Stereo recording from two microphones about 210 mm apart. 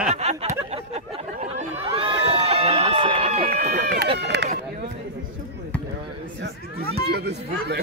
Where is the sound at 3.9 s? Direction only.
50° right (ahead or behind).